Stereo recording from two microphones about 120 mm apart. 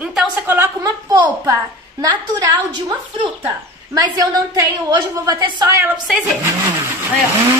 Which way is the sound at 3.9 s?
30° right (ahead or behind).